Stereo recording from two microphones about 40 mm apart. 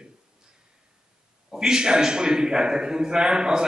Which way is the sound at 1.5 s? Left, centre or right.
Centre.